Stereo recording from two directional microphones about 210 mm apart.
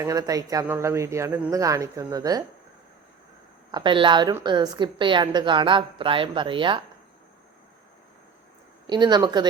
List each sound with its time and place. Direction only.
0.0 s speech: 15° right (ahead or behind)
3.7 s a woman's voice: 20° right (ahead or behind)
8.9 s a woman's voice: 20° right (ahead or behind)